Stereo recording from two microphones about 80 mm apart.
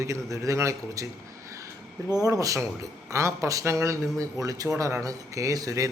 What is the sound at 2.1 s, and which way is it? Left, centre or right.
Speech, right.